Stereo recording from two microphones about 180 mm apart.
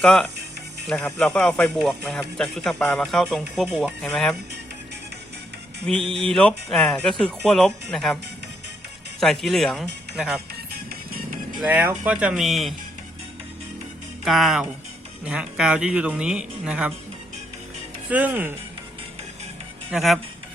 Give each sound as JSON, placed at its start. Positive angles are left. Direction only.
{"t": 0.0, "sound": "speech", "side_deg": 5}
{"t": 6.0, "sound": "music", "side_deg": -30}
{"t": 6.2, "sound": "speech", "side_deg": 0}
{"t": 9.2, "sound": "speech", "side_deg": 0}
{"t": 10.7, "sound": "music", "side_deg": -55}
{"t": 11.6, "sound": "speech", "side_deg": -10}
{"t": 14.3, "sound": "speech", "side_deg": 0}
{"t": 18.1, "sound": "speech", "side_deg": -10}
{"t": 19.9, "sound": "speech", "side_deg": 0}